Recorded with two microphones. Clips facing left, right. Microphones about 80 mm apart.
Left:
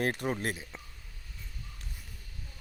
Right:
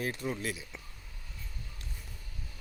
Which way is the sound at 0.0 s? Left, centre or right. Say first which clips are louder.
Left 4 dB; left.